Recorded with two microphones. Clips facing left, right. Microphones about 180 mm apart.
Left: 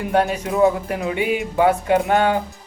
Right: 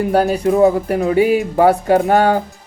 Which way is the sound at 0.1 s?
35° right (ahead or behind).